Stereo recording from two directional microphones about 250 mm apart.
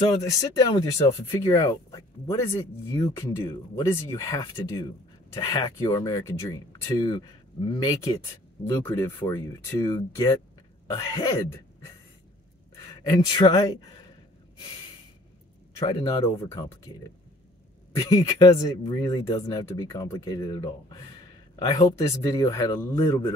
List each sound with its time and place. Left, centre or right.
0.3 s speech: centre
13.0 s speech: centre
15.8 s speech: centre
18.1 s speech: centre